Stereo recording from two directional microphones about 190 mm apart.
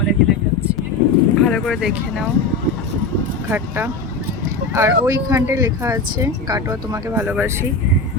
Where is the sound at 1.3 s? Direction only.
Centre (ahead or behind).